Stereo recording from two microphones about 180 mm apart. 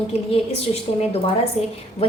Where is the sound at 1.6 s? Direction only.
40° left (ahead or behind).